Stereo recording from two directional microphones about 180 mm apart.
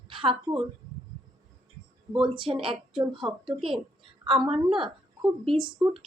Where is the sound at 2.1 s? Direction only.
30° right (ahead or behind).